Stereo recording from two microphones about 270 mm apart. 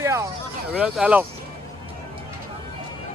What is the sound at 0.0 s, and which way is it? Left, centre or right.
Vehicle, centre.